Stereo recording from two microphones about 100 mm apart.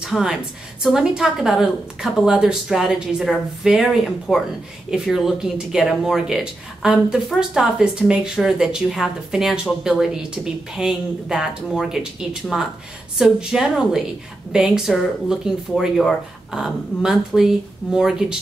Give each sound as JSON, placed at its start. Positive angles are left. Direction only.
{"t": 0.0, "sound": "a woman's voice", "side_deg": -5}